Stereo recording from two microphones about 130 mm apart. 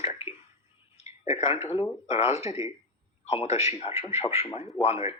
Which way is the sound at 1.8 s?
55° left (ahead or behind).